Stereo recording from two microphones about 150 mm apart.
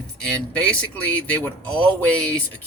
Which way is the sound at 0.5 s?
10° left (ahead or behind).